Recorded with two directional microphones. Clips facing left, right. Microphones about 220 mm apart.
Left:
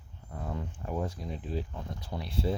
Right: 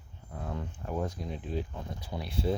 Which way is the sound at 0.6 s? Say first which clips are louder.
Right 1 dB; 5° left (ahead or behind).